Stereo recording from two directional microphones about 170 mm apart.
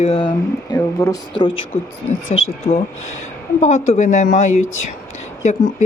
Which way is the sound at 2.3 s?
40° left (ahead or behind).